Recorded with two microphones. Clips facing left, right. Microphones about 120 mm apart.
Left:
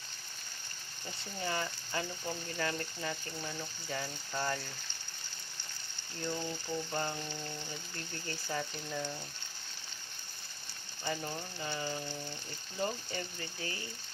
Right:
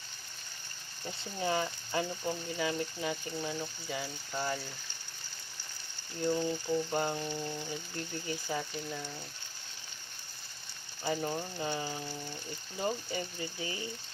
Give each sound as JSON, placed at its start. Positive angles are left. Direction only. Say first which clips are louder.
{"t": 1.4, "sound": "ratchet", "louder": "right 5 dB", "side_deg": -20}
{"t": 2.6, "sound": "frying", "louder": "right 3 dB", "side_deg": -10}
{"t": 3.8, "sound": "speech", "louder": "right 1 dB", "side_deg": -5}
{"t": 6.2, "sound": "frying", "louder": "right 7 dB", "side_deg": -10}
{"t": 8.9, "sound": "speech", "louder": "left 2 dB", "side_deg": -5}
{"t": 11.0, "sound": "ratchet", "louder": "right 5 dB", "side_deg": -25}
{"t": 12.8, "sound": "frying", "louder": "right 2 dB", "side_deg": -15}